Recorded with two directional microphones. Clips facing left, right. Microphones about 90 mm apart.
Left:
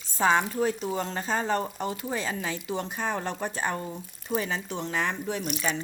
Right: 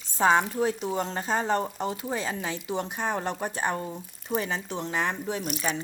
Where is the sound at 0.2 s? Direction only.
25° right (ahead or behind).